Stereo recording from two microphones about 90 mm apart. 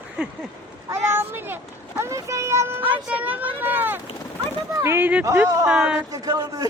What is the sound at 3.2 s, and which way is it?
Speech, 20° right (ahead or behind).